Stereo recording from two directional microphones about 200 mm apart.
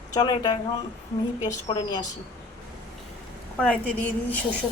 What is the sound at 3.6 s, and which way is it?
Speech, 5° left (ahead or behind).